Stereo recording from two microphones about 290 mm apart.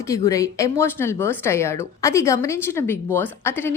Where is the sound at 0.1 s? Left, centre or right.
Centre.